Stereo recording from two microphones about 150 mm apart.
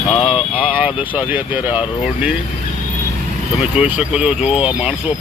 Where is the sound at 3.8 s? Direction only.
10° right (ahead or behind).